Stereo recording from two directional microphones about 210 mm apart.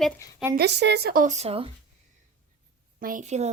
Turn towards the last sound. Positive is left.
turn(degrees=-35)  # may be behind; listen again after turning